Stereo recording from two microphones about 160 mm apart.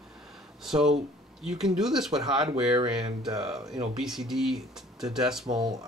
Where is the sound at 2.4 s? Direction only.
30° right (ahead or behind).